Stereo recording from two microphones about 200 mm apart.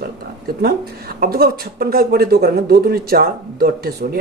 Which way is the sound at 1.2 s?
50° right (ahead or behind).